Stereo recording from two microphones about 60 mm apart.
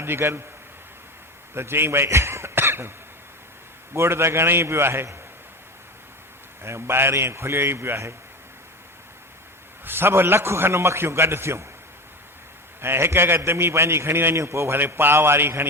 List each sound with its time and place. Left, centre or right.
0.0 s a man's voice: right
1.5 s speech: right
3.9 s a man's voice: right
6.6 s a man's voice: right
9.8 s a man's voice: right
12.8 s a man's voice: right